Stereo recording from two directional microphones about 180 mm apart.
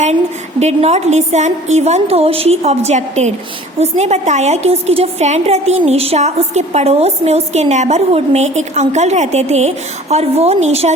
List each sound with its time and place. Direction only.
0.6 s a woman's voice: 40° right (ahead or behind)